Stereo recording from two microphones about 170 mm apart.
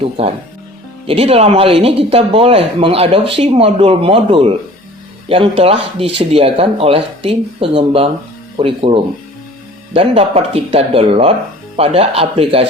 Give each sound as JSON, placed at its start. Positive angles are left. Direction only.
{"t": 0.2, "sound": "speech", "side_deg": -35}